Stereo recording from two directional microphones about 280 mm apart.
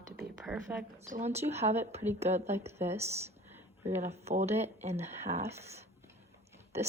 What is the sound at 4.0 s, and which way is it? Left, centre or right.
A woman's voice, right.